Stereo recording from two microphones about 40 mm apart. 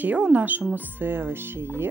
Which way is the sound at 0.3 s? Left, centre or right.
Right.